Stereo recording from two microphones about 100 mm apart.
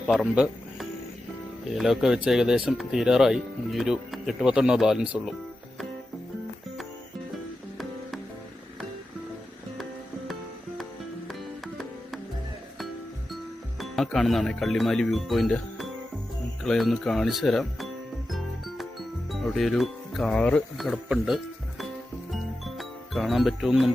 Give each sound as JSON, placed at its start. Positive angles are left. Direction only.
{"t": 0.1, "sound": "music", "side_deg": 0}
{"t": 1.7, "sound": "speech", "side_deg": -5}
{"t": 11.3, "sound": "music", "side_deg": 0}
{"t": 13.7, "sound": "speech", "side_deg": 0}
{"t": 16.6, "sound": "music", "side_deg": 0}
{"t": 19.3, "sound": "speech", "side_deg": 0}
{"t": 20.7, "sound": "speech", "side_deg": 0}
{"t": 22.3, "sound": "music", "side_deg": 0}